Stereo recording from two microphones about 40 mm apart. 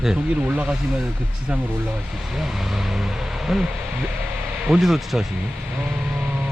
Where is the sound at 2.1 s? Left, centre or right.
Centre.